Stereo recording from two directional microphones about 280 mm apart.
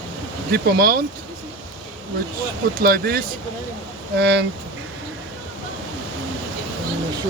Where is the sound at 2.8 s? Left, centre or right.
Right.